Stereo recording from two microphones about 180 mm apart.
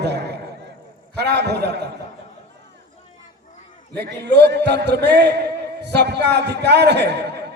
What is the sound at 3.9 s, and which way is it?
A man's voice, 65° right (ahead or behind).